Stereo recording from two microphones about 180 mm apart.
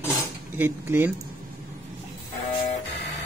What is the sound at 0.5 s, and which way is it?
Speech, 10° right (ahead or behind).